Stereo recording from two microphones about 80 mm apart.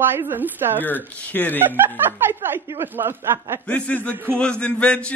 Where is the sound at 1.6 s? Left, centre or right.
Right.